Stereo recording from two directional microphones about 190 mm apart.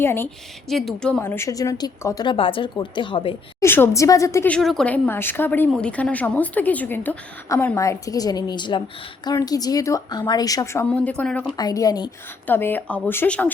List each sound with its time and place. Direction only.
0.0 s a woman's voice: 10° left (ahead or behind)
0.7 s a woman's voice: centre (ahead or behind)
1.2 s speech: 15° left (ahead or behind)
3.6 s a woman's voice: 15° left (ahead or behind)
11.5 s speech: 20° left (ahead or behind)
12.5 s a woman's voice: 10° left (ahead or behind)